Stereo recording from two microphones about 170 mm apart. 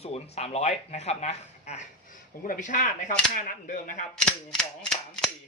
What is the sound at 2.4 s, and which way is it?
Speech, 50° left (ahead or behind).